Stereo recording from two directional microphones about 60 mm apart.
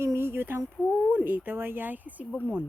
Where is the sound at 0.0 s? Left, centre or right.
Right.